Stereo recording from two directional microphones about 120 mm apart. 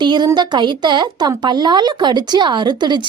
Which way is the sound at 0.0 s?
40° right (ahead or behind).